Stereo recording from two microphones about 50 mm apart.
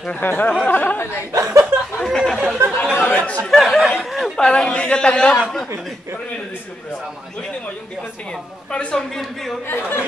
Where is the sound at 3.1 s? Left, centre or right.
Left.